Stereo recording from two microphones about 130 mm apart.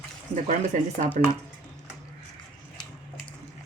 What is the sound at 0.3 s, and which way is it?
Speech, 60° right (ahead or behind).